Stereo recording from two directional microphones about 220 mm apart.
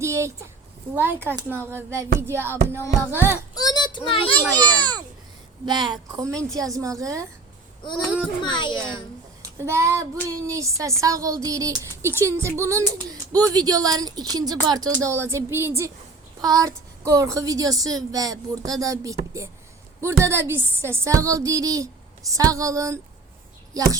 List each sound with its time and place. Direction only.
0.0 s a woman's voice: 15° right (ahead or behind)
2.7 s music: 10° left (ahead or behind)
3.5 s a sound: 15° left (ahead or behind)
5.6 s a woman's voice: 20° right (ahead or behind)
8.4 s a child's voice: 20° left (ahead or behind)
9.4 s a woman's voice: 10° right (ahead or behind)